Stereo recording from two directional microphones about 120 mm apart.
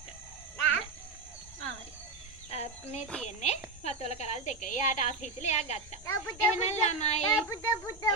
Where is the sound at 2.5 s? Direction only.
60° left (ahead or behind).